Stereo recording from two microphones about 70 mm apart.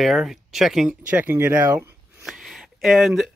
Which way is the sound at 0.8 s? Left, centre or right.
Right.